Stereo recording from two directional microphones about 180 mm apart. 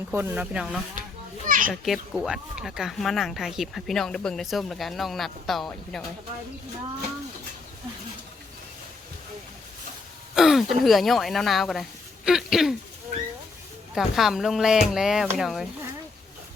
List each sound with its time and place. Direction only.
0.1 s speech: 10° right (ahead or behind)
1.5 s children playing: 50° right (ahead or behind)
1.7 s speech: centre (ahead or behind)
10.3 s speech: centre (ahead or behind)
13.9 s speech: centre (ahead or behind)